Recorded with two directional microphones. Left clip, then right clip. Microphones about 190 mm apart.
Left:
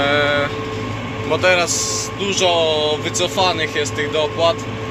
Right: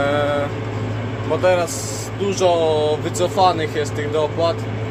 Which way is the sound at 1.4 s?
15° right (ahead or behind).